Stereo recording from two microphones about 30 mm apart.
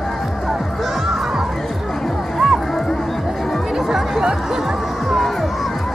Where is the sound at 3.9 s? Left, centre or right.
Right.